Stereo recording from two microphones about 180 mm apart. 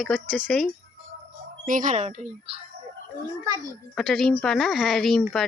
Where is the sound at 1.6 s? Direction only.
45° right (ahead or behind).